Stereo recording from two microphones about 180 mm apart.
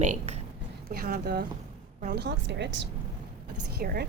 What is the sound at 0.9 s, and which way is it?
Speech, 55° right (ahead or behind).